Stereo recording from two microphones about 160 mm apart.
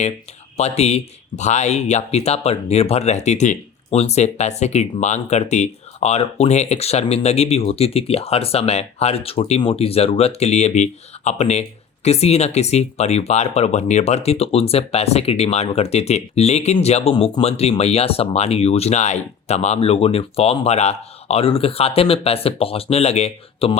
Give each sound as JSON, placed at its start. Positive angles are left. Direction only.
{"t": 0.5, "sound": "speech", "side_deg": 40}